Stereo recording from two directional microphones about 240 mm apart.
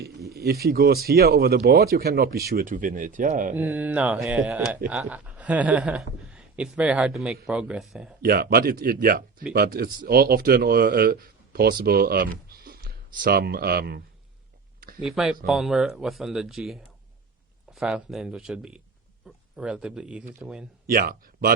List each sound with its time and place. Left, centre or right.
0.3 s speech: right
3.5 s speech: centre
8.2 s speech: right
15.0 s speech: centre
20.8 s speech: right